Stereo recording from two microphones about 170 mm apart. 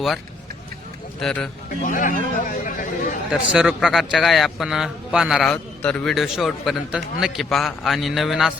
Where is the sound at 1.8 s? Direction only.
50° left (ahead or behind).